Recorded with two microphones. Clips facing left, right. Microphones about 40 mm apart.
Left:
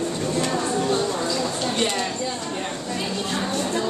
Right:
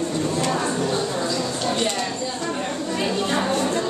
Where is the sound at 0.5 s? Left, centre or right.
Centre.